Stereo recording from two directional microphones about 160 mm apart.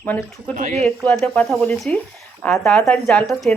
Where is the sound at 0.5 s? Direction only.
50° right (ahead or behind).